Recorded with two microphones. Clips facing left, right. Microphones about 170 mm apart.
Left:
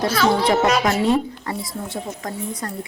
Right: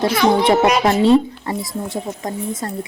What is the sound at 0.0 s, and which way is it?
A woman's voice, 20° right (ahead or behind).